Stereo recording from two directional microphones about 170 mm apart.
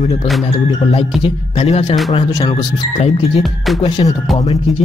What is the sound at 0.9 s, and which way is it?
Speech, 35° left (ahead or behind).